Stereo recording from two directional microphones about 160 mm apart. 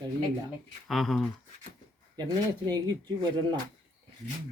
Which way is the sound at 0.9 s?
Centre (ahead or behind).